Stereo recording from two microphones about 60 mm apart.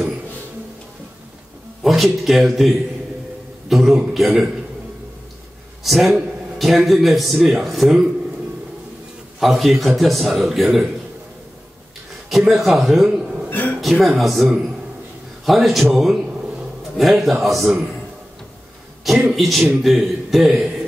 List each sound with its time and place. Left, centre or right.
1.8 s a man's voice: centre
5.9 s a man's voice: centre
9.4 s a man's voice: centre
12.3 s a man's voice: centre
13.5 s a sound: left
14.0 s a man's voice: centre
19.3 s a man's voice: centre